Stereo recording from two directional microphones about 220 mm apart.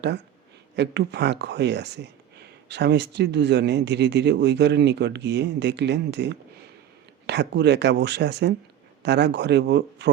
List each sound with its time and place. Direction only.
0.8 s speech: 50° right (ahead or behind)